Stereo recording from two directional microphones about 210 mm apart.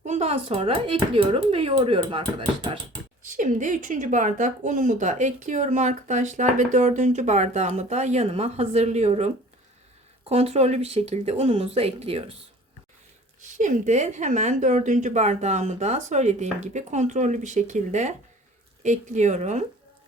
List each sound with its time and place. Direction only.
0.0 s speech: 30° right (ahead or behind)
3.2 s a woman's voice: 35° right (ahead or behind)
13.4 s a woman's voice: 35° right (ahead or behind)